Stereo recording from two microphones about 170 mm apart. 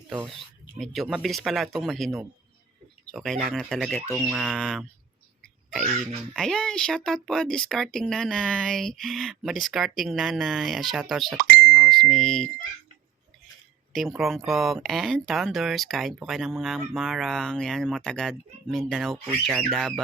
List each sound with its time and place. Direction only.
0.8 s speech: centre (ahead or behind)
5.8 s speech: 45° right (ahead or behind)
6.3 s speech: centre (ahead or behind)
11.3 s ding: 55° right (ahead or behind)
11.8 s a sound: centre (ahead or behind)
13.9 s speech: centre (ahead or behind)